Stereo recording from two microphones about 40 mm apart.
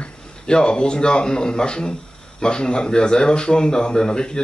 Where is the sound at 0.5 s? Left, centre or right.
Left.